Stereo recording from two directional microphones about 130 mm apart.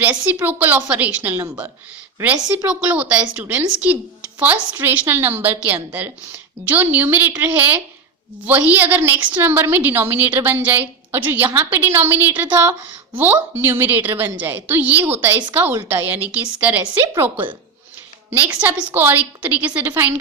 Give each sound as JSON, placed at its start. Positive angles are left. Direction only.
{"t": 0.0, "sound": "a woman's voice", "side_deg": -10}
{"t": 2.6, "sound": "a woman's voice", "side_deg": -10}